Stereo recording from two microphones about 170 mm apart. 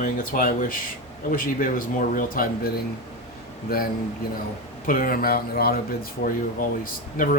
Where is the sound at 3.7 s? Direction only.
65° left (ahead or behind).